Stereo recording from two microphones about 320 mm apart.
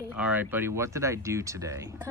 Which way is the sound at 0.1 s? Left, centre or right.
Centre.